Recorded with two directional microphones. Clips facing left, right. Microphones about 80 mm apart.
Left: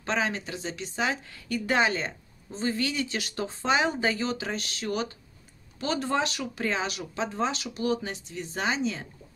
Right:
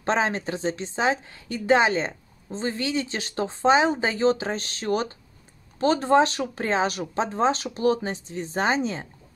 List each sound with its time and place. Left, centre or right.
0.0 s a woman's voice: right